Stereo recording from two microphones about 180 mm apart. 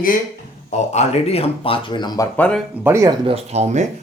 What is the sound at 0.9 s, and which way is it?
Speech, 35° left (ahead or behind).